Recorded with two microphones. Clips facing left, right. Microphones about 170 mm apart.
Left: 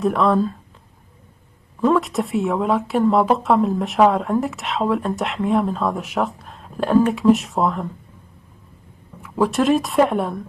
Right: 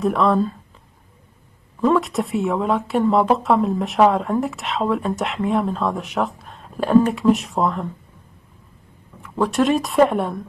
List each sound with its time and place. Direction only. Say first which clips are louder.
0.0 s speech: even; centre (ahead or behind)
1.8 s speech: even; centre (ahead or behind)
9.2 s speech: even; centre (ahead or behind)